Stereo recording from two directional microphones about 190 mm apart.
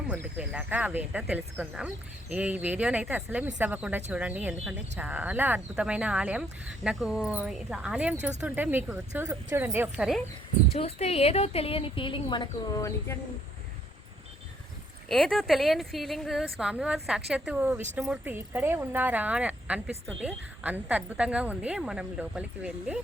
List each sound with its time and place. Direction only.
0.1 s speech: 5° right (ahead or behind)
10.8 s a woman's voice: 35° left (ahead or behind); by 13.1 s 15° left (ahead or behind)
15.1 s a woman's voice: centre (ahead or behind)